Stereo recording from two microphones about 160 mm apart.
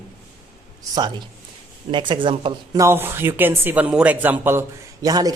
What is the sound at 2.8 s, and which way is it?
Speech, 15° right (ahead or behind).